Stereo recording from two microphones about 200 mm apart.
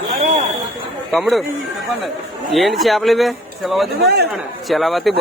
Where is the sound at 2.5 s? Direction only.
Centre (ahead or behind).